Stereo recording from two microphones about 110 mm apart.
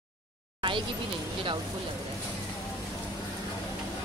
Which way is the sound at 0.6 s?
50° right (ahead or behind).